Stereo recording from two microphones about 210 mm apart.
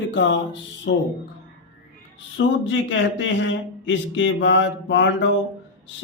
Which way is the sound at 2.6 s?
60° left (ahead or behind).